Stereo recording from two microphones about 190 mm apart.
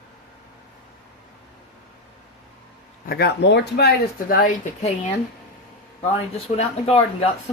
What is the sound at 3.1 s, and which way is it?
Speech, 60° left (ahead or behind).